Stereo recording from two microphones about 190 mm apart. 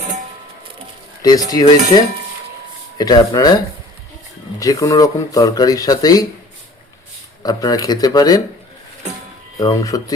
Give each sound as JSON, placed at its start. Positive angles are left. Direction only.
{"t": 1.2, "sound": "speech", "side_deg": 20}
{"t": 4.6, "sound": "speech", "side_deg": 20}
{"t": 7.4, "sound": "speech", "side_deg": 20}
{"t": 9.6, "sound": "speech", "side_deg": 20}